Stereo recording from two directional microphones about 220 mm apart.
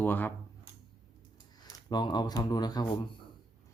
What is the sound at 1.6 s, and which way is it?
Speech, 20° left (ahead or behind).